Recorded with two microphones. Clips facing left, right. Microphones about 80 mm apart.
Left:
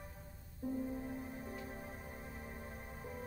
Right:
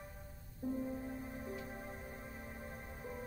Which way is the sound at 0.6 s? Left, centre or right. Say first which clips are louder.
Right 1 dB; centre.